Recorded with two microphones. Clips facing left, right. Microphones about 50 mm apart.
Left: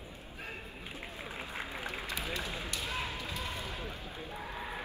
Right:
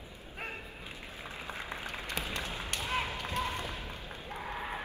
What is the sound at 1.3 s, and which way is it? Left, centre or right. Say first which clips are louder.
Applause: even; left.